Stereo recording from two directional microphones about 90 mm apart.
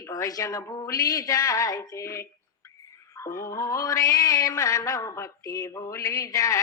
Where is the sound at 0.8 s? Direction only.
40° left (ahead or behind).